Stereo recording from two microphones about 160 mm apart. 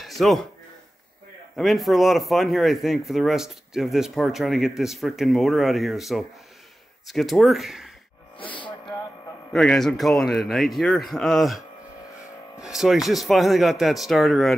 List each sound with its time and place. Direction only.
0.0 s a sound: centre (ahead or behind)
1.6 s speech: centre (ahead or behind)
9.5 s speech: 5° left (ahead or behind)
12.6 s speech: 5° right (ahead or behind)